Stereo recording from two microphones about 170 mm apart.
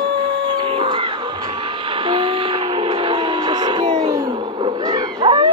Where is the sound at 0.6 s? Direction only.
30° right (ahead or behind).